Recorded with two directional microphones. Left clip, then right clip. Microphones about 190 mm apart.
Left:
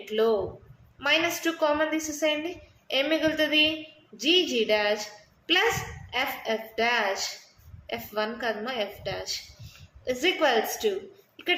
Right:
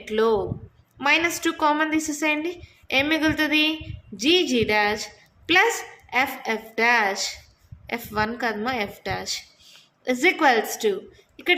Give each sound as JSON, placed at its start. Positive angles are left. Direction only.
{"t": 0.0, "sound": "a woman's voice", "side_deg": -45}
{"t": 6.1, "sound": "a woman's voice", "side_deg": -45}